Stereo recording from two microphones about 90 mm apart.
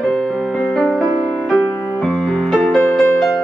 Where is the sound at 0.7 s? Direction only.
Centre (ahead or behind).